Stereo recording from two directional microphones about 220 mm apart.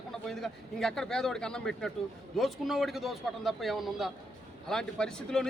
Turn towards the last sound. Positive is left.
turn(degrees=0)  # may be behind; listen again after turning